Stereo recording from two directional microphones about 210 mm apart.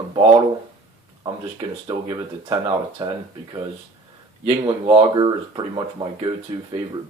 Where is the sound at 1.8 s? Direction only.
20° right (ahead or behind).